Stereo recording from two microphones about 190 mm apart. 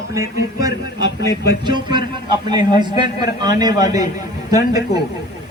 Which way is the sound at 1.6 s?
25° right (ahead or behind).